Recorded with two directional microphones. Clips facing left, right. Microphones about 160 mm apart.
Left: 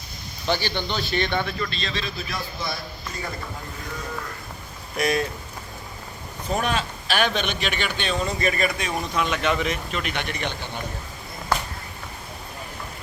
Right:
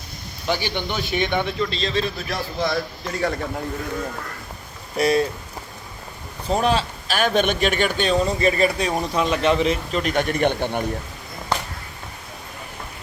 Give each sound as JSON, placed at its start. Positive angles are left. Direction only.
{"t": 0.4, "sound": "speech", "side_deg": -15}
{"t": 1.7, "sound": "speech", "side_deg": -35}
{"t": 2.6, "sound": "speech", "side_deg": -80}
{"t": 4.9, "sound": "speech", "side_deg": -30}
{"t": 6.5, "sound": "speech", "side_deg": -30}
{"t": 7.3, "sound": "speech", "side_deg": -50}